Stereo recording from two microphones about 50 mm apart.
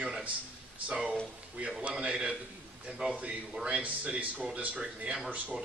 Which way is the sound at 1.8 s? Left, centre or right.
Centre.